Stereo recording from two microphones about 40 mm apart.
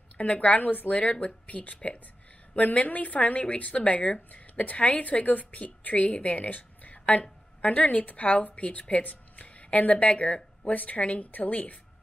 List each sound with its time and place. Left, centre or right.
0.2 s a woman's voice: left
10.7 s speech: left